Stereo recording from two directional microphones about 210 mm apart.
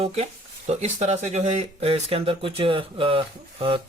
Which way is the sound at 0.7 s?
30° right (ahead or behind).